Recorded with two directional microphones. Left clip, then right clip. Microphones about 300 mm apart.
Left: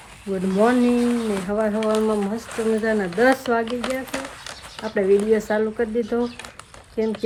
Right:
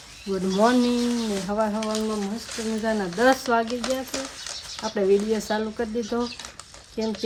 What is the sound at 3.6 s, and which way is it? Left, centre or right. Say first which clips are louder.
Speech: left 1 dB; left.